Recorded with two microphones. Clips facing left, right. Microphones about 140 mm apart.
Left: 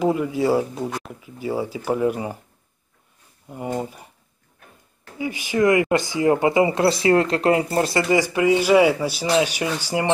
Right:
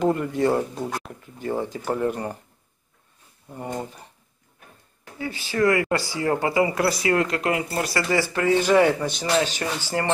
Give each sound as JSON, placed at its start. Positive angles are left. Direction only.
{"t": 0.0, "sound": "speech", "side_deg": 5}
{"t": 3.4, "sound": "a man's voice", "side_deg": 10}
{"t": 5.2, "sound": "speech", "side_deg": 15}
{"t": 8.1, "sound": "a man's voice", "side_deg": 15}